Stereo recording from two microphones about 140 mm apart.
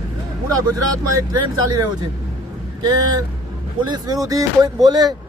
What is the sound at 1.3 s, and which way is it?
Speech, 25° right (ahead or behind).